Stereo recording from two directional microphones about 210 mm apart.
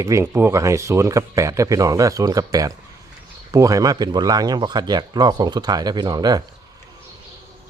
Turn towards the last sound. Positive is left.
turn(degrees=-20)  # may be behind; listen again after turning